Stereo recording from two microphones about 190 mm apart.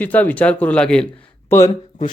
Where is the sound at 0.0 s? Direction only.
10° left (ahead or behind).